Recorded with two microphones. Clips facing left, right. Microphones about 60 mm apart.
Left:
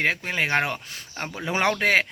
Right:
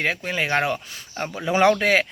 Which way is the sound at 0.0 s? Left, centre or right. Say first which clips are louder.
Even; left.